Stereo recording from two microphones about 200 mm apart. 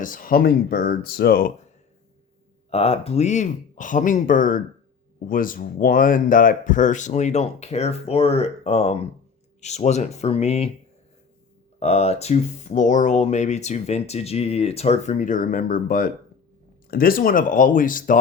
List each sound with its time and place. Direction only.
0.0 s speech: 45° left (ahead or behind)
2.6 s speech: 30° left (ahead or behind)
11.8 s speech: 30° left (ahead or behind)